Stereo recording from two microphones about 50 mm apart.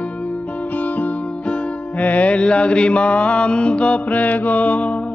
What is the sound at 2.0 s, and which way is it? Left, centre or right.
Mantra, left.